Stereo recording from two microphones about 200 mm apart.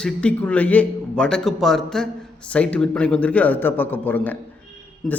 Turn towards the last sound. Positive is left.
turn(degrees=0)  # may be behind; listen again after turning